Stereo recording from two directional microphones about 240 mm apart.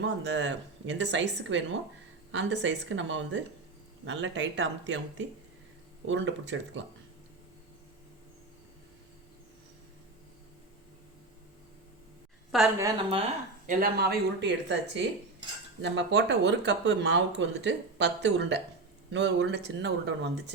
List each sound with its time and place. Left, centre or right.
0.0 s speech: right
12.5 s a woman's voice: centre
12.8 s a woman's voice: right
13.7 s speech: right